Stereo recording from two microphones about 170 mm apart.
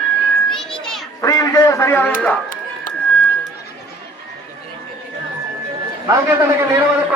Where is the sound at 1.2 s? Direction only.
20° left (ahead or behind).